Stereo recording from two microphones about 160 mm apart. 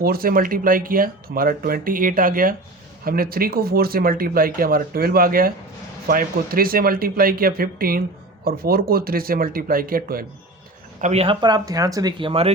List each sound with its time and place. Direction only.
0.0 s speech: 70° right (ahead or behind)
11.0 s speech: 40° right (ahead or behind)